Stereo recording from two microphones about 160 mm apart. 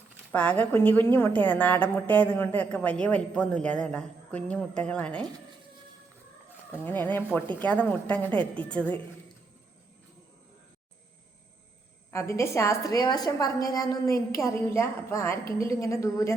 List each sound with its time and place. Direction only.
0.3 s a woman's voice: 10° left (ahead or behind)
6.8 s a woman's voice: 10° left (ahead or behind)
12.1 s a woman's voice: 15° left (ahead or behind)